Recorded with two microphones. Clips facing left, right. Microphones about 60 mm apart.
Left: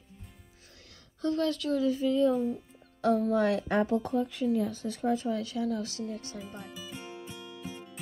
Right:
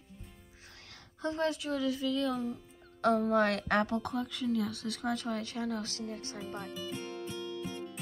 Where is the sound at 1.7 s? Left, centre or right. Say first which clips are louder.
Left 5 dB; right.